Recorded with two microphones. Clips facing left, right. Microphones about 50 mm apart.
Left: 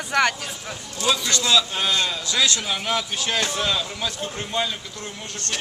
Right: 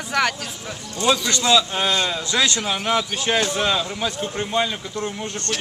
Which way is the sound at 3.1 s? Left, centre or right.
Right.